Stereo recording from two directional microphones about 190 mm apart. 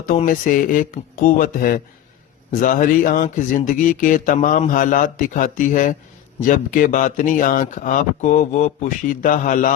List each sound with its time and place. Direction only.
0.3 s speech: 45° left (ahead or behind)